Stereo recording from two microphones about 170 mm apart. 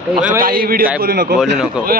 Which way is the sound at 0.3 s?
60° right (ahead or behind).